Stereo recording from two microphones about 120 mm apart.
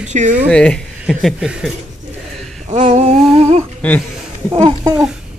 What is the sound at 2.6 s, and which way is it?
Humming, 75° right (ahead or behind).